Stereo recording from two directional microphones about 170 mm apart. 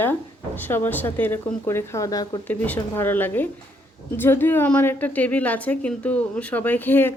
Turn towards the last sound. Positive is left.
turn(degrees=10)  # may be behind; listen again after turning